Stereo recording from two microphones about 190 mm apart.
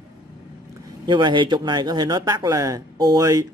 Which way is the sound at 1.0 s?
25° right (ahead or behind).